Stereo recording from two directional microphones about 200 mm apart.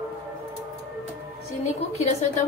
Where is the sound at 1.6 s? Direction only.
30° left (ahead or behind).